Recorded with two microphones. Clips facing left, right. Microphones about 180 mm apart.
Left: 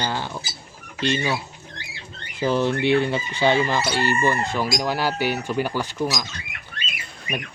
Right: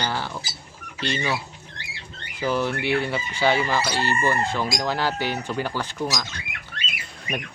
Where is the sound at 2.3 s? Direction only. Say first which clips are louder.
Left 3 dB; 25° left (ahead or behind).